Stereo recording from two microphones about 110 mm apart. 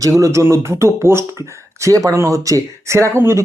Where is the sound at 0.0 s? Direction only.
30° right (ahead or behind).